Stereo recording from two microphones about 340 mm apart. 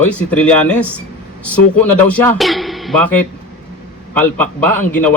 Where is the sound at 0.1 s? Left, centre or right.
Centre.